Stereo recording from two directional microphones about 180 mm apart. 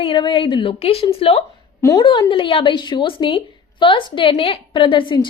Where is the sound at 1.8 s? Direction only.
20° left (ahead or behind).